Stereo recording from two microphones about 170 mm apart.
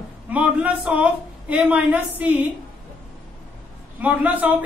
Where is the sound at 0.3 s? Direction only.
5° right (ahead or behind).